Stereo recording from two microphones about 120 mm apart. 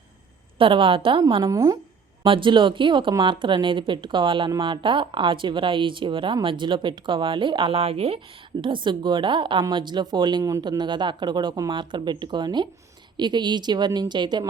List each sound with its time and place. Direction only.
0.6 s a woman's voice: 45° right (ahead or behind)
1.4 s speech: 30° right (ahead or behind)
2.2 s a woman's voice: 45° right (ahead or behind)
8.6 s speech: 40° right (ahead or behind)